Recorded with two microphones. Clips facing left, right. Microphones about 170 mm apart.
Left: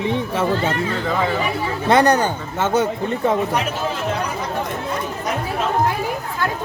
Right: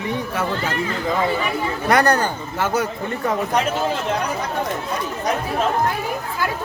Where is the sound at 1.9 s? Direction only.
20° left (ahead or behind).